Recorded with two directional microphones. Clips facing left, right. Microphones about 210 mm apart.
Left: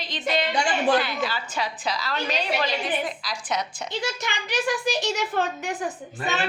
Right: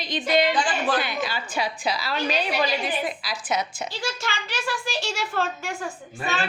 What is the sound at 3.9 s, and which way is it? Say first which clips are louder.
A child's voice: left 1 dB; 20° left (ahead or behind).